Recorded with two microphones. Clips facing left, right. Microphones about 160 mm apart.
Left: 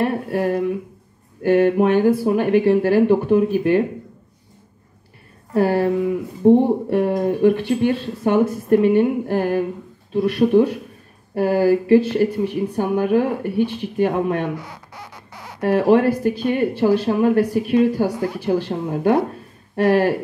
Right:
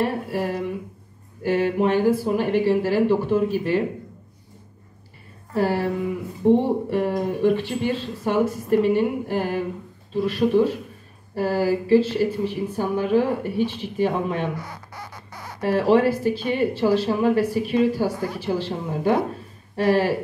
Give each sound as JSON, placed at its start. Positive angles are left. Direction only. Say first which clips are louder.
{"t": 0.0, "sound": "speech", "louder": "left 4 dB", "side_deg": 55}
{"t": 5.5, "sound": "speech", "louder": "left 5 dB", "side_deg": 55}
{"t": 14.6, "sound": "a sound", "louder": "even", "side_deg": 10}
{"t": 15.6, "sound": "speech", "louder": "left 3 dB", "side_deg": 55}